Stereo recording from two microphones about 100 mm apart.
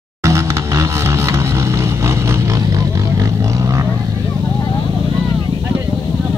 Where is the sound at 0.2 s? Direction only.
30° right (ahead or behind).